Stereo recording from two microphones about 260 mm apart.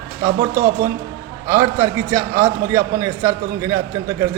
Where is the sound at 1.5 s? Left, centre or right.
Centre.